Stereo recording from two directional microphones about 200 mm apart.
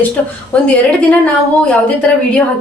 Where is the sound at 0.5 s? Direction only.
5° left (ahead or behind).